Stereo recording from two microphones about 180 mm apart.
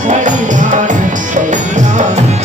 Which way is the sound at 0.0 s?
40° right (ahead or behind).